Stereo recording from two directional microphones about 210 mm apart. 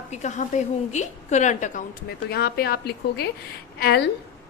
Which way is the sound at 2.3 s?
50° left (ahead or behind).